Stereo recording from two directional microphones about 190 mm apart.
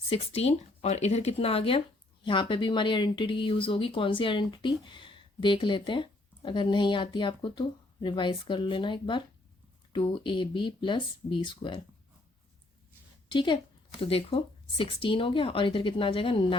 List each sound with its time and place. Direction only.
0.1 s speech: 30° left (ahead or behind)
13.2 s a woman's voice: 25° left (ahead or behind)